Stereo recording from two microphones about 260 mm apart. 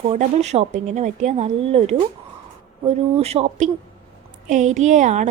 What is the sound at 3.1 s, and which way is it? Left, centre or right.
A woman's voice, right.